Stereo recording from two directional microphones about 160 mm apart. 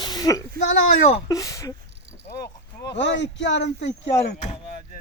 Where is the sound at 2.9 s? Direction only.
90° left.